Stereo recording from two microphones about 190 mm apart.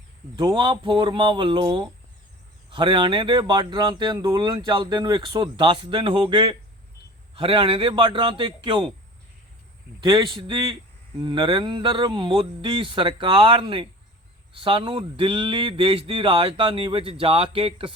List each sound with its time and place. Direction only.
0.3 s speech: 20° right (ahead or behind)
2.6 s speech: 25° right (ahead or behind)
10.0 s speech: 25° right (ahead or behind)